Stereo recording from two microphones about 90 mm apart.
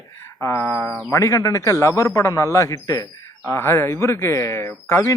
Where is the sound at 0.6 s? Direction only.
20° left (ahead or behind).